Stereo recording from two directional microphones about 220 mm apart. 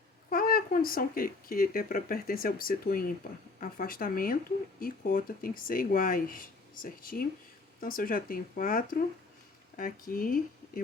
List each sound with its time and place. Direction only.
0.3 s speech: 40° left (ahead or behind)